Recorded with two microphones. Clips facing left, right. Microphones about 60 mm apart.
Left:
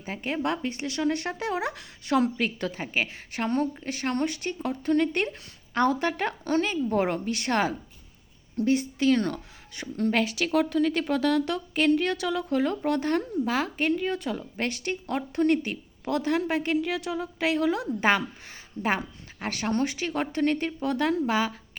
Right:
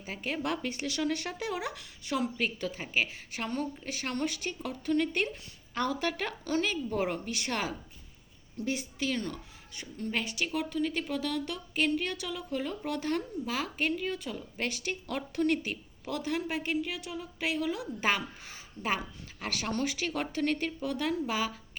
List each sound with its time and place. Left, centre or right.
0.0 s a woman's voice: left
12.8 s speech: left